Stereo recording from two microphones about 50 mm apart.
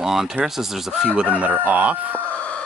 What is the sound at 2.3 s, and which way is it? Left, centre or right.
Chicken, left.